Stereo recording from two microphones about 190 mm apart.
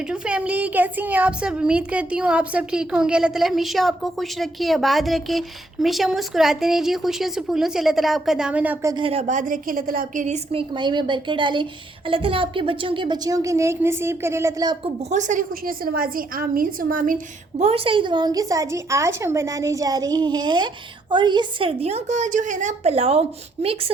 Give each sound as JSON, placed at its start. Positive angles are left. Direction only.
{"t": 0.1, "sound": "speech", "side_deg": -5}
{"t": 9.0, "sound": "a woman's voice", "side_deg": -35}
{"t": 15.1, "sound": "a woman's voice", "side_deg": -40}
{"t": 17.6, "sound": "a woman's voice", "side_deg": -30}